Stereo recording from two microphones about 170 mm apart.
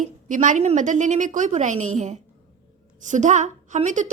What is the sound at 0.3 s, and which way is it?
A woman's voice, 50° right (ahead or behind).